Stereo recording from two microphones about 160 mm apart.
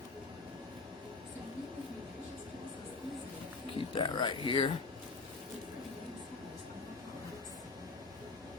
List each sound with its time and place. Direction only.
3.8 s speech: 30° left (ahead or behind)